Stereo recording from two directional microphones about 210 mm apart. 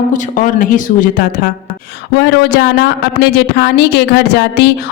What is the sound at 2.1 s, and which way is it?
Speech, 50° left (ahead or behind).